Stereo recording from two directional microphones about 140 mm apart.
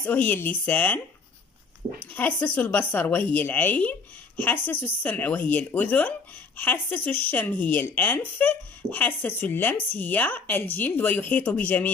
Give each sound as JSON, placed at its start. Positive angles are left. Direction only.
{"t": 0.0, "sound": "speech", "side_deg": 10}
{"t": 2.1, "sound": "speech", "side_deg": 10}